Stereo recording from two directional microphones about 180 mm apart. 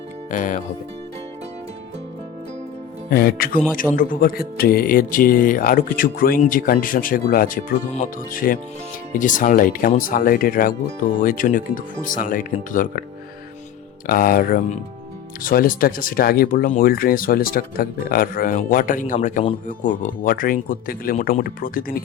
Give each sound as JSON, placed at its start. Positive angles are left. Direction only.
{"t": 0.3, "sound": "speech", "side_deg": 45}
{"t": 3.1, "sound": "speech", "side_deg": 55}
{"t": 14.1, "sound": "speech", "side_deg": 50}